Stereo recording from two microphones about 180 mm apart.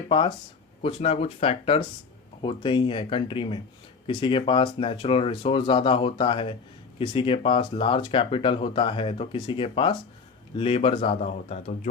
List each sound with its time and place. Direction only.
0.1 s speech: 25° left (ahead or behind)